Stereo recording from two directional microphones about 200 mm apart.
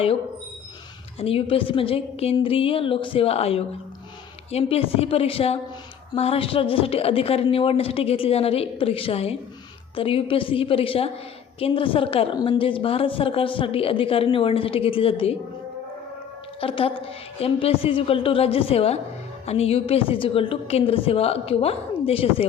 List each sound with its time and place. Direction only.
1.2 s a woman's voice: 30° left (ahead or behind)
16.6 s a woman's voice: 30° left (ahead or behind)